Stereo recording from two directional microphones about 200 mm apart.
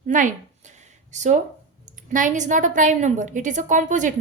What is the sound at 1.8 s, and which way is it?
A woman's voice, 40° right (ahead or behind).